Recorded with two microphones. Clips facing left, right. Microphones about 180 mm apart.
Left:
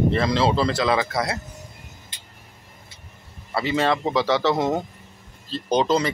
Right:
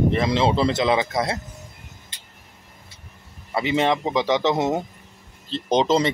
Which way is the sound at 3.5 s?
20° right (ahead or behind).